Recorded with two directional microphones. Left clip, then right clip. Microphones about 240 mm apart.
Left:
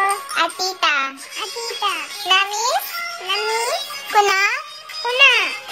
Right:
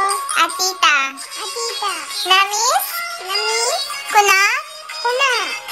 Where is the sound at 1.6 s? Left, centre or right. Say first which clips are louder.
Even; right.